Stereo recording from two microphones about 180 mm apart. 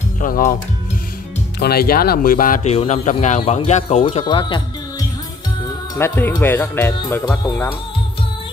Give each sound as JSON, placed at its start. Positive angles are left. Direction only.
{"t": 0.2, "sound": "speech", "side_deg": 50}
{"t": 1.6, "sound": "speech", "side_deg": 60}
{"t": 2.6, "sound": "speech", "side_deg": 35}
{"t": 5.9, "sound": "speech", "side_deg": 10}